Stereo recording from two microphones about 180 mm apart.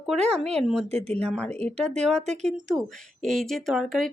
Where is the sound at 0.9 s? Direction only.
35° right (ahead or behind).